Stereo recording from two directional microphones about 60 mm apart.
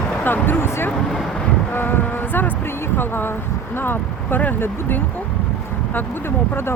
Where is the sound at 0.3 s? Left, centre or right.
Left.